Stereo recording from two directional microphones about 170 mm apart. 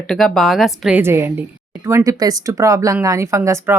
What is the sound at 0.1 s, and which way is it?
A woman's voice, centre (ahead or behind).